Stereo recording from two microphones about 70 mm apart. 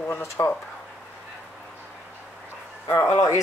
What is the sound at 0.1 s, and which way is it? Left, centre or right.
Speech, left.